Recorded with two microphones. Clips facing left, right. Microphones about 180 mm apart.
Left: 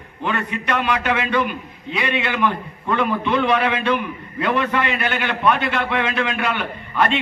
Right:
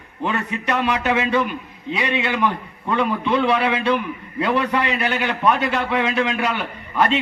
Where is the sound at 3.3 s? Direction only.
30° right (ahead or behind).